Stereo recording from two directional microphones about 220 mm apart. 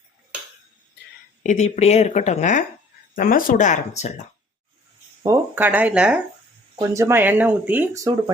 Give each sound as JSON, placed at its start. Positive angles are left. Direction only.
{"t": 1.5, "sound": "speech", "side_deg": 30}
{"t": 5.2, "sound": "speech", "side_deg": -10}